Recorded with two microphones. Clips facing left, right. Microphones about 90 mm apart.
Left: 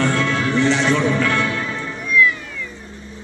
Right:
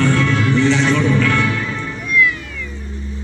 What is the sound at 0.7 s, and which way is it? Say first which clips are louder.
Music: right 2 dB; 25° left (ahead or behind).